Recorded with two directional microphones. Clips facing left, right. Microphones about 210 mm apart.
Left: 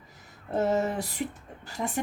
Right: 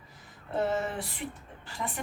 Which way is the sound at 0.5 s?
40° left (ahead or behind).